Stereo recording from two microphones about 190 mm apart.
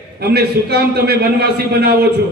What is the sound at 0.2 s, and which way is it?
A man's voice, 55° right (ahead or behind).